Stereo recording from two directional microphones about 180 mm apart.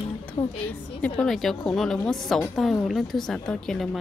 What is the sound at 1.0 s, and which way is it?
A woman's voice, 5° left (ahead or behind).